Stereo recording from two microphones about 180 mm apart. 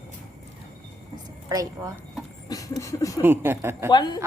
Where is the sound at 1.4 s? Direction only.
20° right (ahead or behind).